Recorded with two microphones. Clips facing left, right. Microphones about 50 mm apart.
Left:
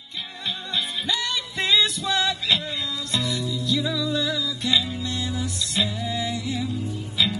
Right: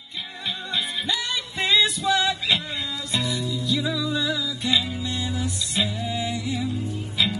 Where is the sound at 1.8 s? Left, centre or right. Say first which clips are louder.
Right 2 dB; right.